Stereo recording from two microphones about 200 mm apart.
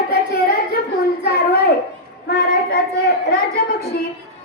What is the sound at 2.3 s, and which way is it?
Child singing, 55° left (ahead or behind).